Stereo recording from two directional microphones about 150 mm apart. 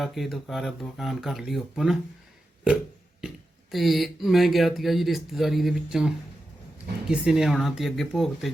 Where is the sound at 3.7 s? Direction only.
Centre (ahead or behind).